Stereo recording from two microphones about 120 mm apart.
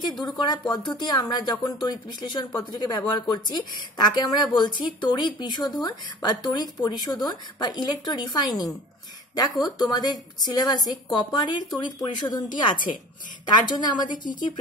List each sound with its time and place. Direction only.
0.2 s a woman's voice: 40° left (ahead or behind)